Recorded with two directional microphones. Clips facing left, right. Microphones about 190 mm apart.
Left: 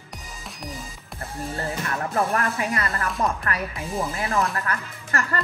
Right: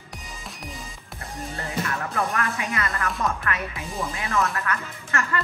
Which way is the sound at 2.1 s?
35° left (ahead or behind).